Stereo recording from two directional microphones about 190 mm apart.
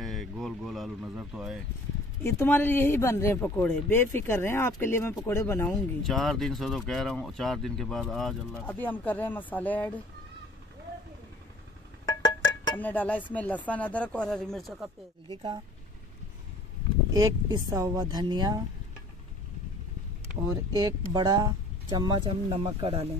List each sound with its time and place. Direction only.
0.0 s speech: centre (ahead or behind)
2.2 s speech: 10° left (ahead or behind)
5.8 s speech: centre (ahead or behind)
12.1 s music: 20° left (ahead or behind)
12.7 s speech: 10° left (ahead or behind)
15.2 s a woman's voice: 25° right (ahead or behind)
17.1 s a woman's voice: 20° right (ahead or behind)
20.7 s a woman's voice: 20° right (ahead or behind)